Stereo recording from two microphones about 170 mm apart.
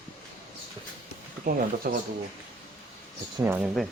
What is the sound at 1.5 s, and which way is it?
Speech, 60° right (ahead or behind).